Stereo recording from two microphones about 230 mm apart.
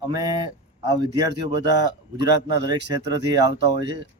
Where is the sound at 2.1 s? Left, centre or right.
Centre.